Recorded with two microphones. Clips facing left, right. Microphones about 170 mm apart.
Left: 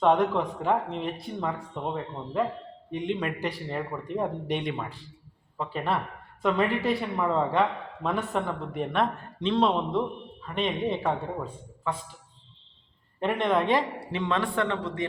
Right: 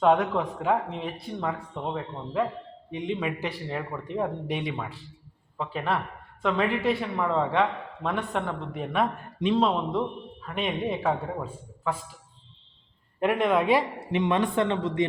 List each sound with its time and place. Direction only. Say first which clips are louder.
0.0 s a man's voice: even; 5° right (ahead or behind)
13.1 s speech: right 2 dB; 5° right (ahead or behind)
14.0 s a man's voice: right 4 dB; 20° right (ahead or behind)